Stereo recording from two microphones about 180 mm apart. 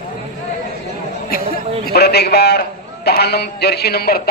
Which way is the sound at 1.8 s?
65° left (ahead or behind).